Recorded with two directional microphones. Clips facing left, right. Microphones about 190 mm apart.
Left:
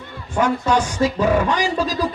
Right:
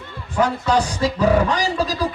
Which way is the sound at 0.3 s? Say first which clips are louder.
Even; 35° right (ahead or behind).